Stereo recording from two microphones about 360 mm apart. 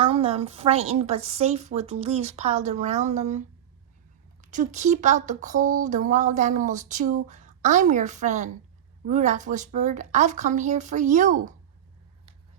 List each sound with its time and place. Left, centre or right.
0.0 s a woman's voice: centre